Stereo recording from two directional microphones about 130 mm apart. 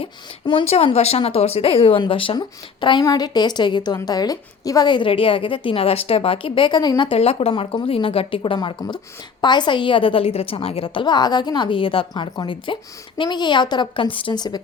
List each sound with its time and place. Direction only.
0.0 s speech: 45° left (ahead or behind)
2.8 s a woman's voice: 35° left (ahead or behind)
8.4 s a woman's voice: 35° left (ahead or behind)